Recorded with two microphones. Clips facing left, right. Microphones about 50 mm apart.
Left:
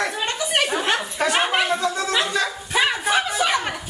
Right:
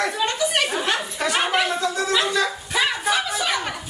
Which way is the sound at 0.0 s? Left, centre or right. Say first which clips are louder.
Right 2 dB; centre.